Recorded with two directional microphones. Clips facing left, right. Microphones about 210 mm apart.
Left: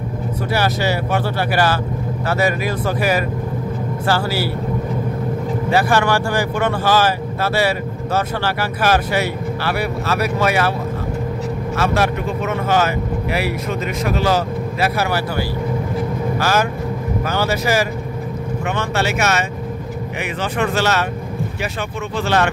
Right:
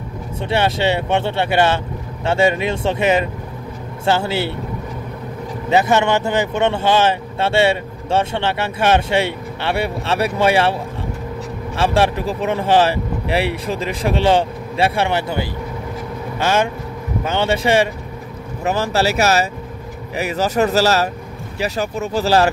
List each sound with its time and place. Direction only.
0.5 s speech: 25° right (ahead or behind)
5.7 s speech: 20° right (ahead or behind)
11.7 s speech: 30° right (ahead or behind)